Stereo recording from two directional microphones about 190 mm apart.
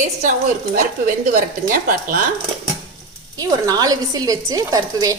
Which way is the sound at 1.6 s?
50° right (ahead or behind).